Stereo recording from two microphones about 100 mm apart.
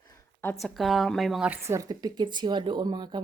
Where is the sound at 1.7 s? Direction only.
35° right (ahead or behind).